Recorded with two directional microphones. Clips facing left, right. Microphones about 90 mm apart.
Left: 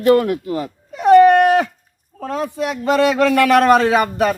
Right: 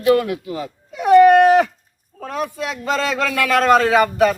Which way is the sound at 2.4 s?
25° left (ahead or behind).